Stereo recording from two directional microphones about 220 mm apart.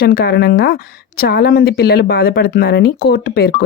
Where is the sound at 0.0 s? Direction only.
40° left (ahead or behind).